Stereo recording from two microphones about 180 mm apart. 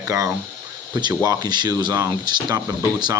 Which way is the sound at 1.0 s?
20° right (ahead or behind).